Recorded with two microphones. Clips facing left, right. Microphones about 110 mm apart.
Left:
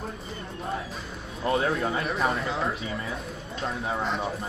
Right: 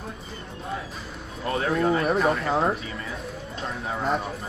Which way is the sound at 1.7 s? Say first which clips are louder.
Right 5 dB; centre (ahead or behind).